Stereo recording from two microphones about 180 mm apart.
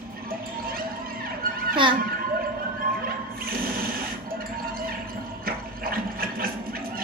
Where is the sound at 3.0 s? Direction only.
55° right (ahead or behind).